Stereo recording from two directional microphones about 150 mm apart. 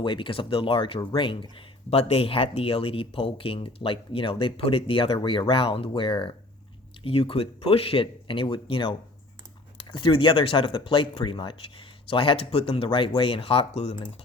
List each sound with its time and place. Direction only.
0.0 s speech: 30° left (ahead or behind)